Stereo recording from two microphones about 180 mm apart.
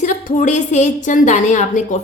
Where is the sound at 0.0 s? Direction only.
45° left (ahead or behind).